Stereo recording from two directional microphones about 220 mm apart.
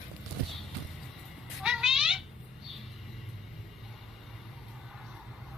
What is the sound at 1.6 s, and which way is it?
Cat, centre (ahead or behind).